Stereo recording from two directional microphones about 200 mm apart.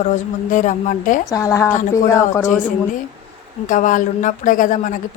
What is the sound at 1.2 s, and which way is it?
Speech, 15° left (ahead or behind).